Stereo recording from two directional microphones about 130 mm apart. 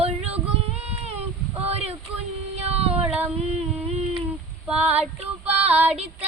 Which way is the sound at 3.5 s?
55° right (ahead or behind).